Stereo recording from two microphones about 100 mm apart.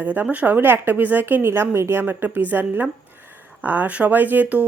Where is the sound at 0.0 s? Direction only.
15° right (ahead or behind).